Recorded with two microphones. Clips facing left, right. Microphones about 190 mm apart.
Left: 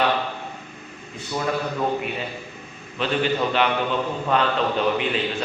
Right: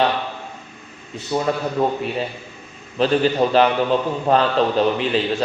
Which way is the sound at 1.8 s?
35° right (ahead or behind).